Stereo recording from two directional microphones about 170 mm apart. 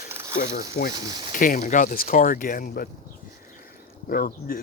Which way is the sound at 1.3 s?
55° left (ahead or behind).